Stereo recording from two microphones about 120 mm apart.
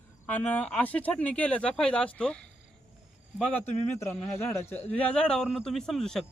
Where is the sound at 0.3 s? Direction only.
10° left (ahead or behind).